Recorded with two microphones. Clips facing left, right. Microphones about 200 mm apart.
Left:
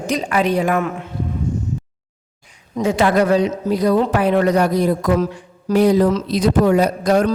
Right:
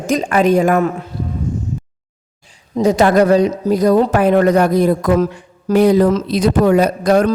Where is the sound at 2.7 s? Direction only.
40° right (ahead or behind).